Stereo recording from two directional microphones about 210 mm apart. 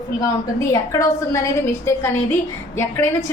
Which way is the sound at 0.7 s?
15° left (ahead or behind).